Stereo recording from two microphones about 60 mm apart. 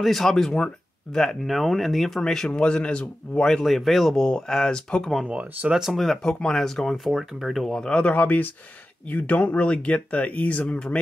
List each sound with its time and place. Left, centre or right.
0.0 s speech: centre
1.5 s speech: centre
3.6 s speech: centre
5.2 s speech: centre
5.8 s speech: centre
7.9 s speech: left